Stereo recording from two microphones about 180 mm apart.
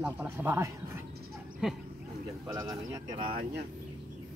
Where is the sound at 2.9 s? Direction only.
25° right (ahead or behind).